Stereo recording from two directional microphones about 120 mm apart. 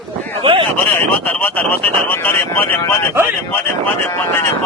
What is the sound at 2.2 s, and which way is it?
Speech, 15° left (ahead or behind).